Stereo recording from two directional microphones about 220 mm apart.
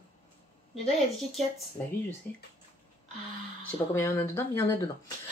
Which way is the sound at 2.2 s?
10° left (ahead or behind).